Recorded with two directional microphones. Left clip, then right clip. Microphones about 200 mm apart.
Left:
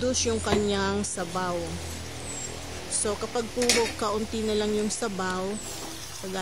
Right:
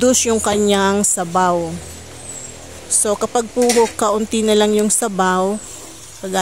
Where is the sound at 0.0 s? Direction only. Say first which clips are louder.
Right 12 dB; 45° right (ahead or behind).